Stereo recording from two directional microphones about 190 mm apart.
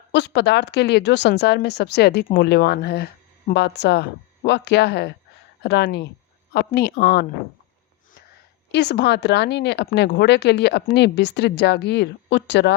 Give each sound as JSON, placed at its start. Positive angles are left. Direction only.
{"t": 0.1, "sound": "speech", "side_deg": 65}
{"t": 8.7, "sound": "speech", "side_deg": 60}